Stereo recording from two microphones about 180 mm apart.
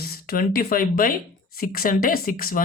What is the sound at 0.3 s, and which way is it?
Speech, 55° left (ahead or behind).